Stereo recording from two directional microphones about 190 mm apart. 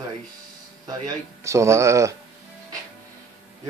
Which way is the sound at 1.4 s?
15° right (ahead or behind).